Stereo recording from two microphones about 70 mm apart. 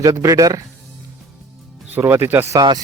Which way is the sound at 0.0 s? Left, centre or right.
Right.